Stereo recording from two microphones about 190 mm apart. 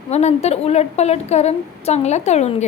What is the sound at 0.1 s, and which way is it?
A woman's voice, 35° left (ahead or behind).